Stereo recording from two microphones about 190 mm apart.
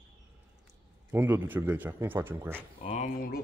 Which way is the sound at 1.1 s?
10° right (ahead or behind).